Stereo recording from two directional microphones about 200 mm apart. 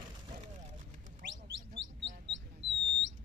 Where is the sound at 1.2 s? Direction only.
65° right (ahead or behind).